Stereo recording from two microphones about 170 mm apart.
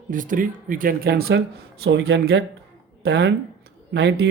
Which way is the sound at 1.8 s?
80° right.